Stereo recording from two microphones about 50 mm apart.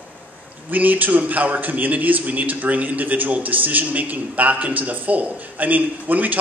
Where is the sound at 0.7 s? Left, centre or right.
Right.